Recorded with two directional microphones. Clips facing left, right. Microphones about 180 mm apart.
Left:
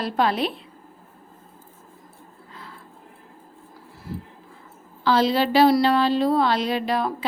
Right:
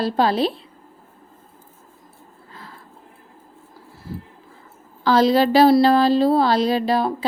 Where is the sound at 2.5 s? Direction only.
40° right (ahead or behind).